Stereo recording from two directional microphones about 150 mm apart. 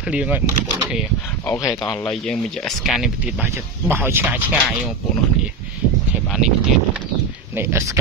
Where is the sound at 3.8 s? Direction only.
15° right (ahead or behind).